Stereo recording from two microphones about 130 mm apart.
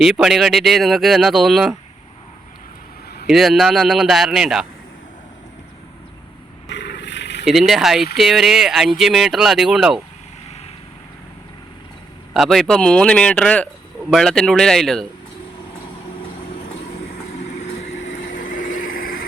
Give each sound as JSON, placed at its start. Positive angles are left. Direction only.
{"t": 0.0, "sound": "speech", "side_deg": -5}
{"t": 3.2, "sound": "speech", "side_deg": 0}
{"t": 7.4, "sound": "speech", "side_deg": 0}
{"t": 12.3, "sound": "speech", "side_deg": 0}
{"t": 18.3, "sound": "vehicle", "side_deg": 90}